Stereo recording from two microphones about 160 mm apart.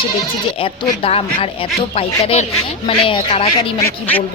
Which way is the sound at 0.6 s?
35° left (ahead or behind).